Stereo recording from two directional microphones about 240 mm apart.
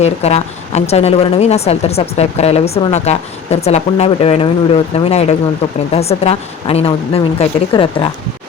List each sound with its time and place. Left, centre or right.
0.0 s a woman's voice: left